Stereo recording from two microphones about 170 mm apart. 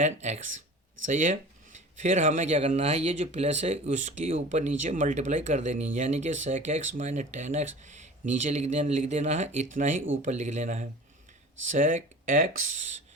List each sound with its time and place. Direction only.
0.0 s speech: 45° right (ahead or behind)